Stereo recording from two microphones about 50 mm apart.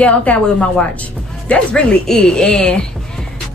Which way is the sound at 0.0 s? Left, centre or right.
Left.